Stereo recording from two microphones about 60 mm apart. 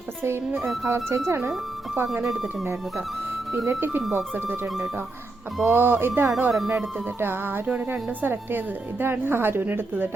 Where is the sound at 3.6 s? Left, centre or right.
Right.